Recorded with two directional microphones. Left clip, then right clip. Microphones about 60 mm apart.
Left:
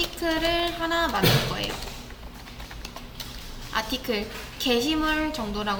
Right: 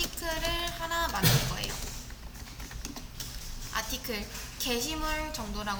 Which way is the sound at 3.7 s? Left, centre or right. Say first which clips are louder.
Left 7 dB; right.